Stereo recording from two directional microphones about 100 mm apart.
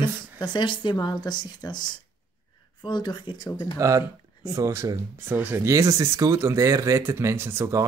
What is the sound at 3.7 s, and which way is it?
Speech, 35° right (ahead or behind).